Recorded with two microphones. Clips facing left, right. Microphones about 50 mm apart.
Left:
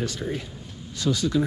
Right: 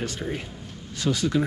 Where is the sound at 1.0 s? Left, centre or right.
Right.